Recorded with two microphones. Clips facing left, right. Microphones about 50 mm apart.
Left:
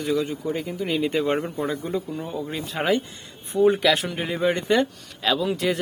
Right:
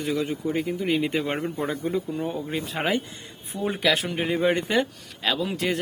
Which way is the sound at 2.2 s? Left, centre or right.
Centre.